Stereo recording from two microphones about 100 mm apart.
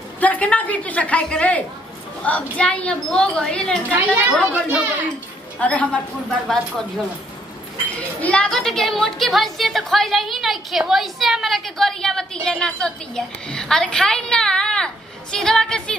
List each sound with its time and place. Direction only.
0.2 s speech: 15° left (ahead or behind)
3.9 s speech: 15° right (ahead or behind)
5.6 s speech: 15° left (ahead or behind)
8.2 s a woman's voice: 10° left (ahead or behind)